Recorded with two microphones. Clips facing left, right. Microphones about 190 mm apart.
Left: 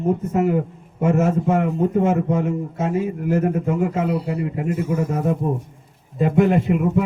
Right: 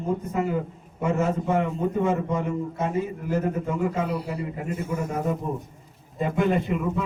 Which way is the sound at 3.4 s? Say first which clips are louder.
Left 5 dB; 55° left (ahead or behind).